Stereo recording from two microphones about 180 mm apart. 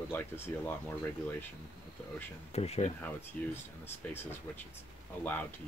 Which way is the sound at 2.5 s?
35° left (ahead or behind).